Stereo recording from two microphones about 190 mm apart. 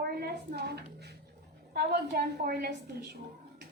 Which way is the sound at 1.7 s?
55° right (ahead or behind).